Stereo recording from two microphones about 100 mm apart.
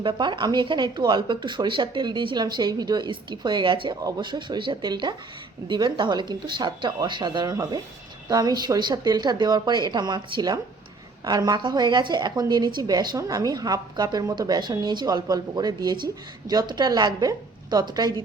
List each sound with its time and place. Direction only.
0.0 s speech: 50° right (ahead or behind)